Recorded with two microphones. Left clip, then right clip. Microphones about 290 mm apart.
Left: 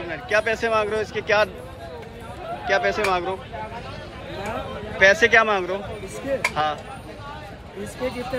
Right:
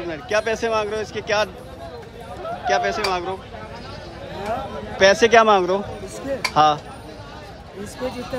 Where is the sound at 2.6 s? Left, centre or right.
Centre.